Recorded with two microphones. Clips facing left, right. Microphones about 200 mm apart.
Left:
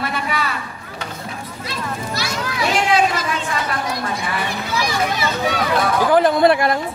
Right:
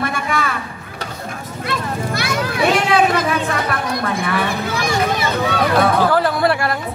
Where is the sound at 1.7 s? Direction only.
55° right (ahead or behind).